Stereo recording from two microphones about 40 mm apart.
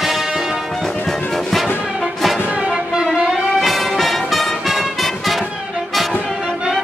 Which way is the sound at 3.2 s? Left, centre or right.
Centre.